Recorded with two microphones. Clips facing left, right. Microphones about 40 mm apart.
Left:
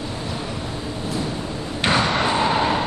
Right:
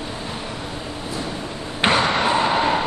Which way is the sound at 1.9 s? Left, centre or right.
Centre.